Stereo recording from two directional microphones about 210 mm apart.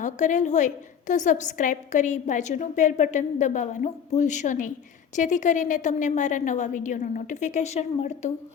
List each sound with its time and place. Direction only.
0.0 s a woman's voice: 35° left (ahead or behind)